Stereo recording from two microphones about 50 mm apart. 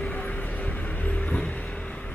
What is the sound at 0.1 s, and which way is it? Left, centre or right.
Vehicle, left.